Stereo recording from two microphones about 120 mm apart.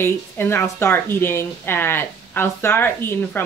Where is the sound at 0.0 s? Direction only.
20° left (ahead or behind).